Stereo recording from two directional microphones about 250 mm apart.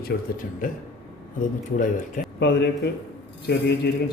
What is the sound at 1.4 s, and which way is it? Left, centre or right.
Speech, left.